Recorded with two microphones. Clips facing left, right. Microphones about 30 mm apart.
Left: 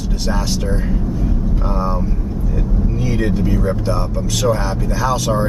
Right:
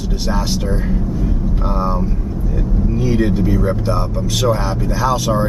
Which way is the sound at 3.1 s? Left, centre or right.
Centre.